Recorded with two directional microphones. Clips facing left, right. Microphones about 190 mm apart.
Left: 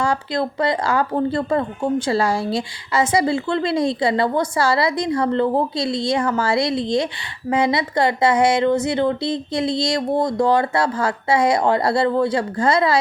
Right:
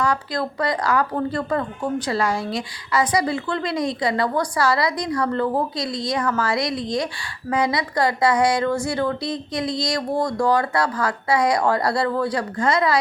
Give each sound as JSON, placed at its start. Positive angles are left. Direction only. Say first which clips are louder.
{"t": 0.0, "sound": "speech", "louder": "left 2 dB", "side_deg": 25}